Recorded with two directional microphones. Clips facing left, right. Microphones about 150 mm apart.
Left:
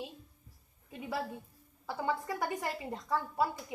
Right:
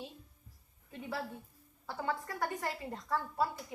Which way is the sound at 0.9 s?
10° left (ahead or behind).